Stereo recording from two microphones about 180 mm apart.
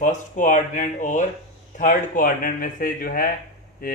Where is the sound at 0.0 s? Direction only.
45° left (ahead or behind).